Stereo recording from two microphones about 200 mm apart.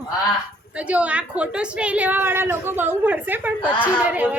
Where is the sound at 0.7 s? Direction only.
5° right (ahead or behind).